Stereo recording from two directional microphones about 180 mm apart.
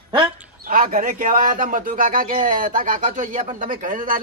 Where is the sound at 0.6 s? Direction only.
50° right (ahead or behind).